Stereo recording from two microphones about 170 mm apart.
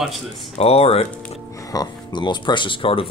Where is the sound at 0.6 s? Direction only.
35° left (ahead or behind).